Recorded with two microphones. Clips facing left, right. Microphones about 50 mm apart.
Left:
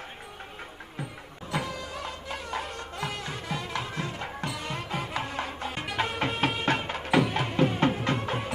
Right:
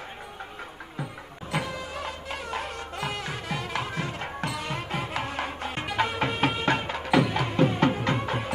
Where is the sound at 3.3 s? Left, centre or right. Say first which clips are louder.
Right 2 dB; right.